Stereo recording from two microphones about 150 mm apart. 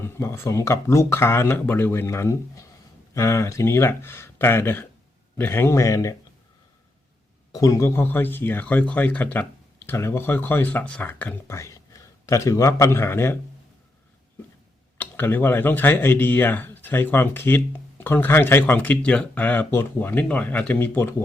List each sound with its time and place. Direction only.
0.0 s speech: 15° left (ahead or behind)
7.5 s speech: 20° left (ahead or behind)
14.9 s speech: 15° left (ahead or behind)